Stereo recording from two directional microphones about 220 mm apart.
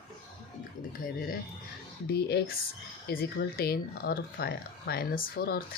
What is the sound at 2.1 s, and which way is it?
Speech, 45° left (ahead or behind).